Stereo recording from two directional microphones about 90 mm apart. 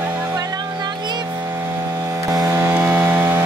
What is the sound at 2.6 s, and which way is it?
Vehicle, 25° right (ahead or behind).